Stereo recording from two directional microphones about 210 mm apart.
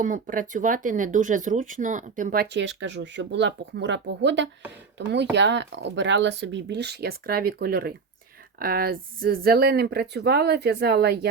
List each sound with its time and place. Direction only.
0.0 s speech: 40° right (ahead or behind)